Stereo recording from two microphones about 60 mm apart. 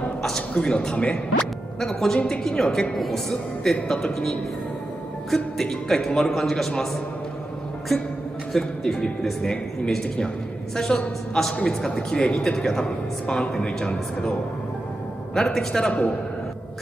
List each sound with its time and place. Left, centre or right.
0.6 s speech: centre
1.8 s speech: centre
15.3 s speech: centre